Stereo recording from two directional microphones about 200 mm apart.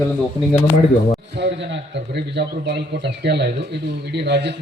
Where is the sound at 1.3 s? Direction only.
60° right (ahead or behind).